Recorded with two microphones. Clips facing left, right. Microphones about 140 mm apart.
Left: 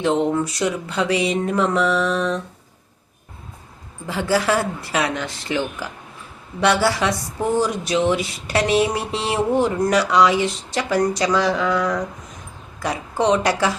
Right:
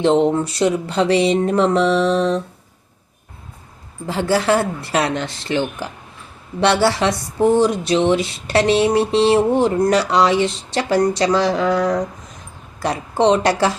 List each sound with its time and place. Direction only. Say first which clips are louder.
0.0 s speech: right 4 dB; 25° right (ahead or behind)
4.0 s speech: right 2 dB; 30° right (ahead or behind)